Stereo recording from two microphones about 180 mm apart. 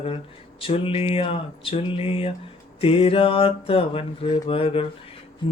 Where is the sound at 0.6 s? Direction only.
30° left (ahead or behind).